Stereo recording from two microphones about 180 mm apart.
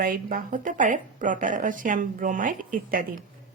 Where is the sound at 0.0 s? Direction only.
50° right (ahead or behind).